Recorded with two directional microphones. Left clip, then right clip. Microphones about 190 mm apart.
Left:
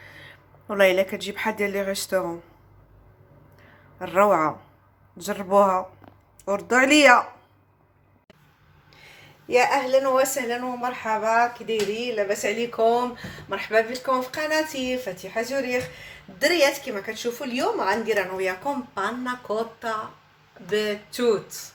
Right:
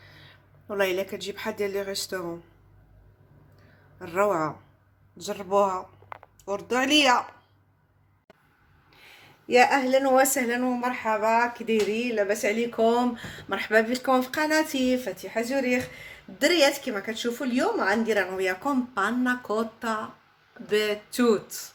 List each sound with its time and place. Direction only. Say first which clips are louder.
0.0 s speech: left 7 dB; centre (ahead or behind)
4.0 s speech: left 6 dB; centre (ahead or behind)
8.9 s a sound: left 2 dB; centre (ahead or behind)
9.9 s speech: left 1 dB; 45° right (ahead or behind)